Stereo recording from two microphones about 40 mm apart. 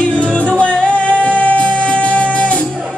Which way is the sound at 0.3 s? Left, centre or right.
Left.